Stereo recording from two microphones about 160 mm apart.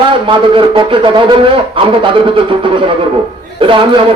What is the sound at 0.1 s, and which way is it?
A man's voice, 30° right (ahead or behind).